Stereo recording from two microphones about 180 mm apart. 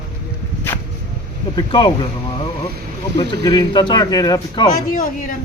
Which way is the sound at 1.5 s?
25° left (ahead or behind).